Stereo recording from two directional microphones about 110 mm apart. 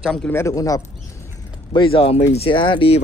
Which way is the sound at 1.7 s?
55° left (ahead or behind).